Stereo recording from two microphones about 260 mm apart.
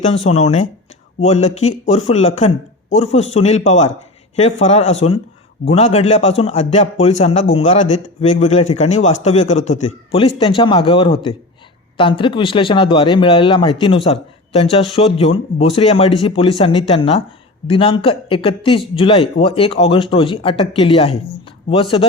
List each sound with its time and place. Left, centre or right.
0.3 s a man's voice: left